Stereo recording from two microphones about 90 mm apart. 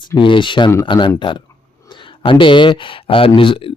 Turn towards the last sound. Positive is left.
turn(degrees=75)  # may be behind; listen again after turning